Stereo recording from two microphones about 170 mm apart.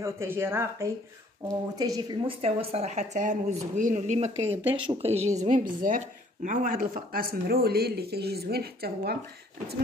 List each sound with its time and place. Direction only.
0.0 s speech: 15° right (ahead or behind); by 5.3 s 40° right (ahead or behind)
5.4 s speech: 50° right (ahead or behind); by 9.2 s 65° right (ahead or behind)